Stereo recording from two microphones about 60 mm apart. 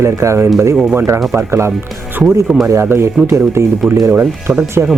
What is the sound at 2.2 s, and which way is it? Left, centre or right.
Speech, right.